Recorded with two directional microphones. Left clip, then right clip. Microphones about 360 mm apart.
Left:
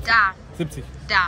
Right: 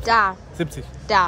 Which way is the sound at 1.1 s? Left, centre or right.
Centre.